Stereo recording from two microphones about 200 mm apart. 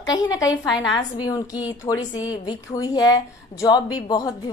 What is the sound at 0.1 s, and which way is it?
A woman's voice, 20° left (ahead or behind).